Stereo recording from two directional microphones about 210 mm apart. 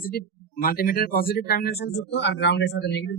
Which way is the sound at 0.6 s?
45° left (ahead or behind).